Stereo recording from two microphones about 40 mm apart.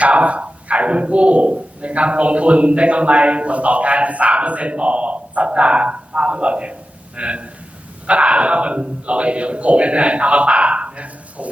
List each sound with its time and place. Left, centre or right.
0.0 s speech: right